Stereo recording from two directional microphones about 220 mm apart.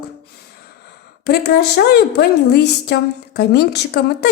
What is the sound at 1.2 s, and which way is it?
A woman's voice, 45° left (ahead or behind).